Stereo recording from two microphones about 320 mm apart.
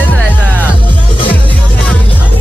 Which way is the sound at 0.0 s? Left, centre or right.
Centre.